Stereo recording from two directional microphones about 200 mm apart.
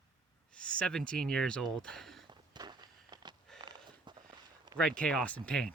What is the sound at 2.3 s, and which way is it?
Walk, 20° right (ahead or behind).